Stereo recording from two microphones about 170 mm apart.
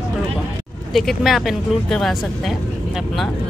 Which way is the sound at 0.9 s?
Centre (ahead or behind).